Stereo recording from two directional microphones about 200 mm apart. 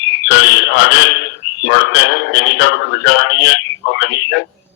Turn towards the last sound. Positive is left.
turn(degrees=65)  # may be behind; listen again after turning